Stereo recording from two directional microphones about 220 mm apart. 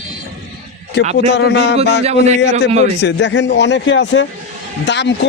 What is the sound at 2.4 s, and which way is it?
A man's voice, 50° left (ahead or behind).